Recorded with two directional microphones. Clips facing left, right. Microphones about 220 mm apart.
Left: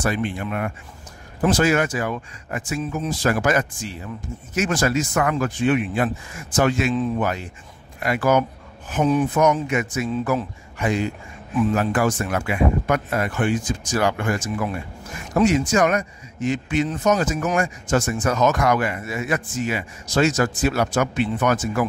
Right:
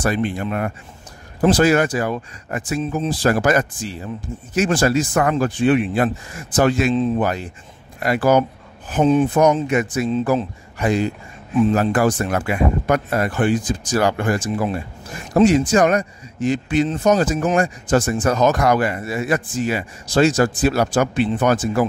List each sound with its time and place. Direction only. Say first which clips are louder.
0.0 s a man's voice: right 3 dB; 40° right (ahead or behind)
6.9 s speech: right 4 dB; 20° right (ahead or behind)
7.2 s a man's voice: right 3 dB; 35° right (ahead or behind)